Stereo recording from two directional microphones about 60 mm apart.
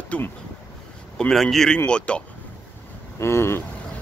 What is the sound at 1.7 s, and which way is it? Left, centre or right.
Speech, centre.